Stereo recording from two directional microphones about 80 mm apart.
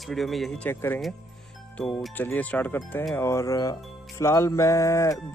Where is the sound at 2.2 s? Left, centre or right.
Left.